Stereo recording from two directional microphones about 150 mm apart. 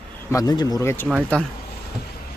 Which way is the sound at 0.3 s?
25° left (ahead or behind).